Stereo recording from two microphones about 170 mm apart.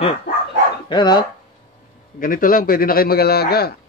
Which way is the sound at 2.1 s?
55° left (ahead or behind).